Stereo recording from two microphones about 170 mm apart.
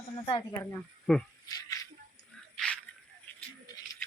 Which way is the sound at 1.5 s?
20° left (ahead or behind).